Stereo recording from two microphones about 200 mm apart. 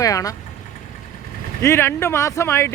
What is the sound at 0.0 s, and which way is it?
Speech, 15° left (ahead or behind).